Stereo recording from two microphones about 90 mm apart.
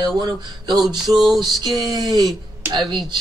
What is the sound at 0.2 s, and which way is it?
Speech, 50° right (ahead or behind).